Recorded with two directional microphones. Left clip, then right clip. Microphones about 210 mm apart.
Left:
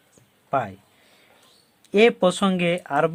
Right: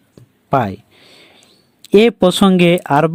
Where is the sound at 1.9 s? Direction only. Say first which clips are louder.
Right 6 dB; 40° right (ahead or behind).